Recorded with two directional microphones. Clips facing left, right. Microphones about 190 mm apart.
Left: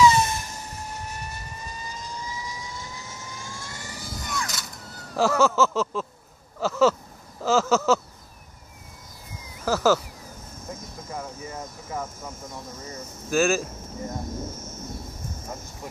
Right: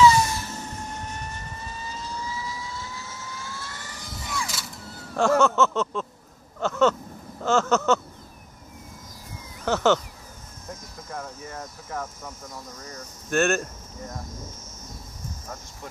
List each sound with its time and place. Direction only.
0.0 s vehicle: 20° left (ahead or behind)
4.2 s a sound: 5° right (ahead or behind)
6.6 s speech: 5° left (ahead or behind)
9.7 s speech: 5° left (ahead or behind)
11.1 s speech: 5° left (ahead or behind)
14.0 s speech: 25° left (ahead or behind)
15.4 s speech: 10° left (ahead or behind)